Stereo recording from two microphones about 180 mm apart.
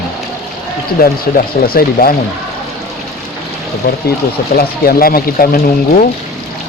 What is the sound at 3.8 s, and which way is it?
Speech, 60° left (ahead or behind).